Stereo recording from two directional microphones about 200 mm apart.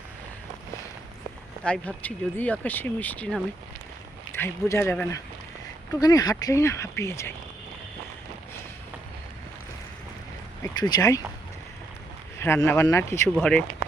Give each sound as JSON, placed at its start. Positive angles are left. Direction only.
{"t": 1.6, "sound": "speech", "side_deg": 5}
{"t": 10.6, "sound": "speech", "side_deg": 20}
{"t": 12.4, "sound": "speech", "side_deg": 10}